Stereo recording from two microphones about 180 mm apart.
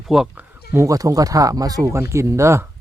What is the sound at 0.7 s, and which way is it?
Speech, 15° right (ahead or behind).